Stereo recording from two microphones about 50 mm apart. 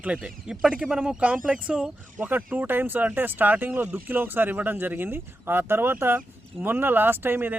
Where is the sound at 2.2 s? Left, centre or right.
Right.